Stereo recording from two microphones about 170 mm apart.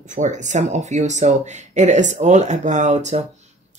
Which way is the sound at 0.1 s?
45° right (ahead or behind).